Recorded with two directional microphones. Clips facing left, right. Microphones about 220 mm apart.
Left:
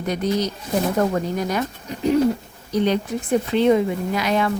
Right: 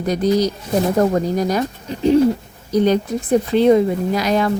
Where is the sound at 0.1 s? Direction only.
35° right (ahead or behind).